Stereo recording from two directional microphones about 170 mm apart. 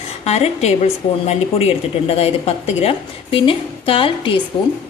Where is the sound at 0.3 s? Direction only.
40° left (ahead or behind).